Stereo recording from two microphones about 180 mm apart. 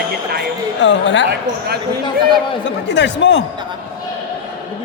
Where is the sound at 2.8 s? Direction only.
85° left.